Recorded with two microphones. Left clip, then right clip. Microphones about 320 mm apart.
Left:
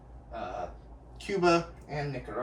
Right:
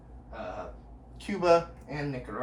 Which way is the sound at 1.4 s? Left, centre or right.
Centre.